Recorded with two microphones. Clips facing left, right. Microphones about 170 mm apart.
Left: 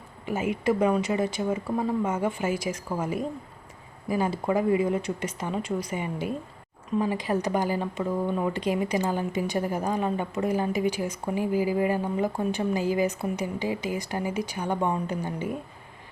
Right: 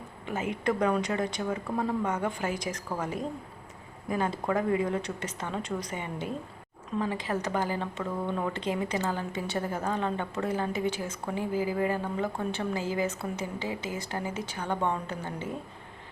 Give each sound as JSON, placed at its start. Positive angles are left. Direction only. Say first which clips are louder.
{"t": 0.3, "sound": "speech", "louder": "left 4 dB", "side_deg": 10}